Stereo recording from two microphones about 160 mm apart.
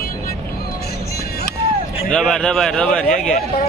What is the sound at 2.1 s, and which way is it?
Speech, 5° left (ahead or behind).